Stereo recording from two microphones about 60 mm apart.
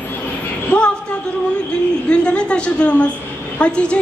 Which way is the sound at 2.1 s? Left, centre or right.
Centre.